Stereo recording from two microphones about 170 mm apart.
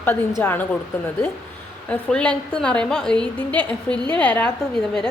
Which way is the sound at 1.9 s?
5° left (ahead or behind).